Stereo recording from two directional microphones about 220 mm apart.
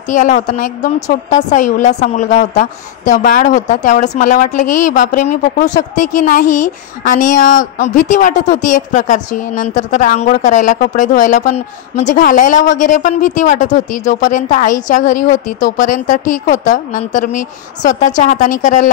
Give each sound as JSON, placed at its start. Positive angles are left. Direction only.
{"t": 0.1, "sound": "a woman's voice", "side_deg": 35}